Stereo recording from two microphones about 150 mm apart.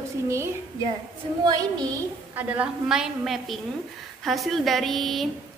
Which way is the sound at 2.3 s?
10° right (ahead or behind).